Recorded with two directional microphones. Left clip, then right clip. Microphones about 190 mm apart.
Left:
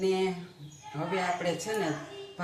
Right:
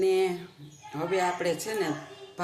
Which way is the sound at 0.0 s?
60° right (ahead or behind).